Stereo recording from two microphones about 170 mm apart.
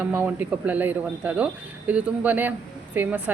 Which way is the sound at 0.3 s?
10° right (ahead or behind).